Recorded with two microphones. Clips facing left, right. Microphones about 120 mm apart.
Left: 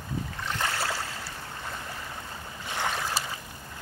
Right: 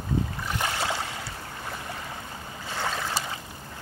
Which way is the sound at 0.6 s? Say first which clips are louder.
Right 2 dB; 20° right (ahead or behind).